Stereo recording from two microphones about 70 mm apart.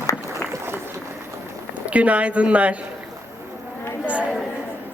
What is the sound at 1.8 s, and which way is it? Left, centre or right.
Speech, centre.